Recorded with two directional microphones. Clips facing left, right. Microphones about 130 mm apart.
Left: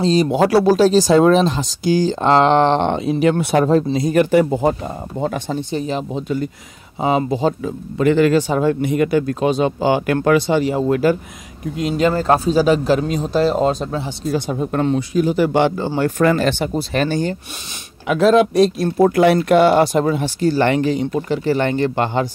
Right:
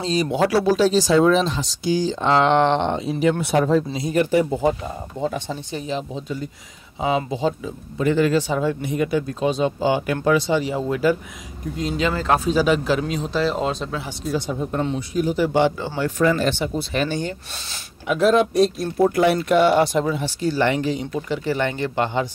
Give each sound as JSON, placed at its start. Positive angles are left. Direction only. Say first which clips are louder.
{"t": 0.3, "sound": "speech", "louder": "left 1 dB", "side_deg": 40}
{"t": 2.8, "sound": "speech", "louder": "left 4 dB", "side_deg": 60}
{"t": 3.6, "sound": "speech", "louder": "left 4 dB", "side_deg": 45}
{"t": 4.1, "sound": "speech", "louder": "left 4 dB", "side_deg": 75}
{"t": 5.2, "sound": "speech", "louder": "left 4 dB", "side_deg": 55}
{"t": 7.0, "sound": "speech", "louder": "left 4 dB", "side_deg": 45}
{"t": 8.0, "sound": "speech", "louder": "left 5 dB", "side_deg": 80}
{"t": 8.4, "sound": "speech", "louder": "left 5 dB", "side_deg": 50}
{"t": 8.8, "sound": "speech", "louder": "left 5 dB", "side_deg": 70}
{"t": 12.1, "sound": "speech", "louder": "left 3 dB", "side_deg": 35}
{"t": 16.7, "sound": "speech", "louder": "left 4 dB", "side_deg": 45}
{"t": 18.0, "sound": "speech", "louder": "left 4 dB", "side_deg": 90}
{"t": 19.6, "sound": "speech", "louder": "left 4 dB", "side_deg": 45}